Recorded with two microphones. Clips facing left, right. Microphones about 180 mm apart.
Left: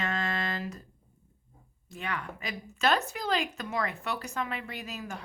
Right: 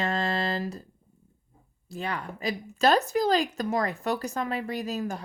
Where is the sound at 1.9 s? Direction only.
35° right (ahead or behind).